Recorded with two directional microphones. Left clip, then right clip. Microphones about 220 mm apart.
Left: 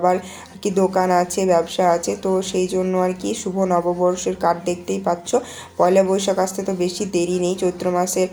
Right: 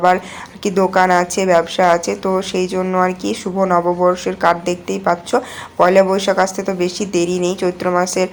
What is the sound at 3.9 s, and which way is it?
Speech, 25° right (ahead or behind).